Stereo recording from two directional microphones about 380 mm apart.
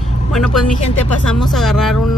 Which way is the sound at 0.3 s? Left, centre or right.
Centre.